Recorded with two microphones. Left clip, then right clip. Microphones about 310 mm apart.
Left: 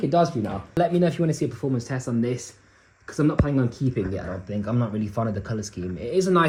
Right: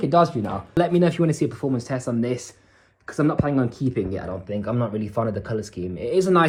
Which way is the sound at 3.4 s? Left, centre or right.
Centre.